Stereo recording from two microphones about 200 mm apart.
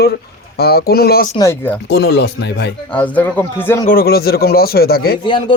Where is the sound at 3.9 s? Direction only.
50° left (ahead or behind).